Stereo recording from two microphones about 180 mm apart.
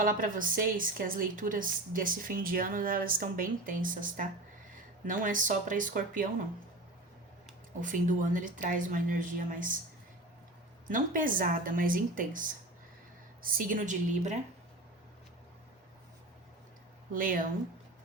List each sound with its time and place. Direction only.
0.0 s a woman's voice: 50° right (ahead or behind)
7.8 s a woman's voice: 45° right (ahead or behind)
10.8 s a woman's voice: 50° right (ahead or behind)
17.1 s a woman's voice: 50° right (ahead or behind)